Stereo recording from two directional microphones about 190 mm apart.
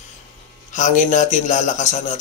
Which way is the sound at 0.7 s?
40° left (ahead or behind).